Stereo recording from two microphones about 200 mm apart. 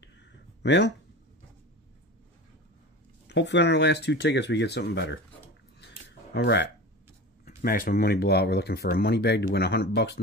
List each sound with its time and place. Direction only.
0.6 s speech: 60° left (ahead or behind)
3.3 s speech: 60° left (ahead or behind)
6.3 s speech: 60° left (ahead or behind)
7.4 s speech: 45° left (ahead or behind)